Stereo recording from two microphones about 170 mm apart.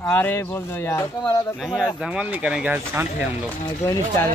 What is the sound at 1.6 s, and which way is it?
Speech, 5° right (ahead or behind).